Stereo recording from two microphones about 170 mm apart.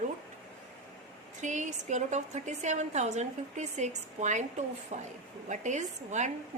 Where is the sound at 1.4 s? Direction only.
45° right (ahead or behind).